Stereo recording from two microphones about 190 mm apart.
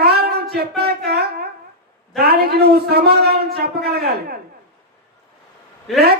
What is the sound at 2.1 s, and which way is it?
Speech, 55° right (ahead or behind).